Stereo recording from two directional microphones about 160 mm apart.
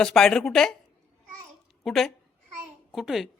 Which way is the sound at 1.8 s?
Centre (ahead or behind).